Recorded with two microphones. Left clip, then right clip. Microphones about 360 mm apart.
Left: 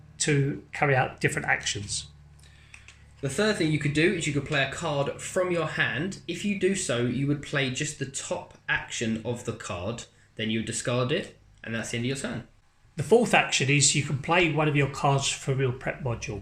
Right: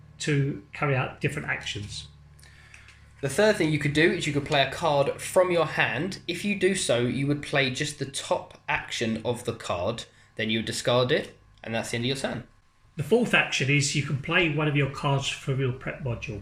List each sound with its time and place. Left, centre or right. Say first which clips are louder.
0.2 s speech: left 2 dB; centre
3.2 s speech: right 4 dB; centre
13.1 s speech: left 2 dB; centre